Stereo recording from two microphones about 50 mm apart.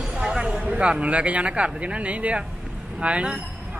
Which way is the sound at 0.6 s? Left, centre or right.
Right.